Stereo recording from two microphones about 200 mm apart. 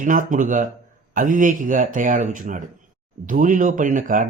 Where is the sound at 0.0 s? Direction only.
40° right (ahead or behind).